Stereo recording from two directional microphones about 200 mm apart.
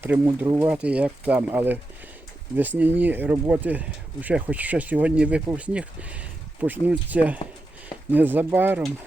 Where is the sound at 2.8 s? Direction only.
10° right (ahead or behind).